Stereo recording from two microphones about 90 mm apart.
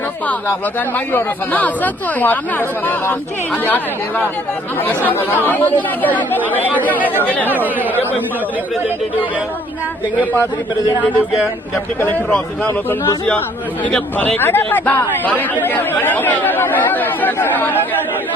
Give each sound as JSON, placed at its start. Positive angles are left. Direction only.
{"t": 0.9, "sound": "speech", "side_deg": 20}
{"t": 4.8, "sound": "speech", "side_deg": 20}
{"t": 7.0, "sound": "speech", "side_deg": -20}
{"t": 7.3, "sound": "speech", "side_deg": 20}
{"t": 13.9, "sound": "speech", "side_deg": 10}